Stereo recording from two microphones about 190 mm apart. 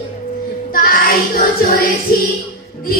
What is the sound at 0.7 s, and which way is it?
Child singing, 50° left (ahead or behind).